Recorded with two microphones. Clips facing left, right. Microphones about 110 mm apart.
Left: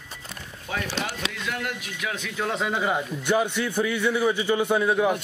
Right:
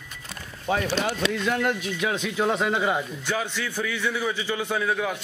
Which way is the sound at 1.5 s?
35° right (ahead or behind).